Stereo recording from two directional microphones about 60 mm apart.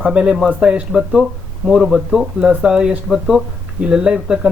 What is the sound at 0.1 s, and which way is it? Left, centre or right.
Speech, centre.